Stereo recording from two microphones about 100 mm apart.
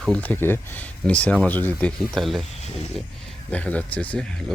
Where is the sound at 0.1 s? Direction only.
15° left (ahead or behind).